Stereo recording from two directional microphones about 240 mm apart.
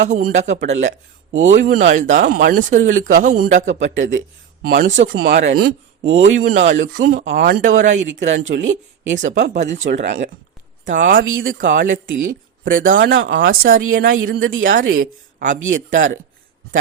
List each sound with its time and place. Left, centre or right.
0.0 s speech: right
1.5 s speech: right
4.6 s speech: right
7.9 s speech: right
8.3 s speech: right
8.5 s speech: right
9.1 s speech: right
10.0 s speech: right
10.8 s speech: right
11.1 s speech: right
12.1 s speech: right
14.1 s speech: right
14.7 s speech: right
15.5 s speech: right